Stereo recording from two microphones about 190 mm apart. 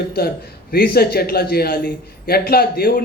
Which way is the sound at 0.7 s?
55° left (ahead or behind).